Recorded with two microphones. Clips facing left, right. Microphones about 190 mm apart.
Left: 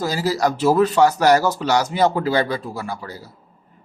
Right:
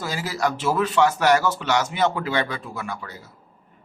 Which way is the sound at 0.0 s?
40° left (ahead or behind).